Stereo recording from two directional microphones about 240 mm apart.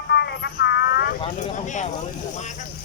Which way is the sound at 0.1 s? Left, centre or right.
Left.